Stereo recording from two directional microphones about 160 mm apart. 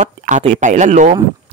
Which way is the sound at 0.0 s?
50° right (ahead or behind).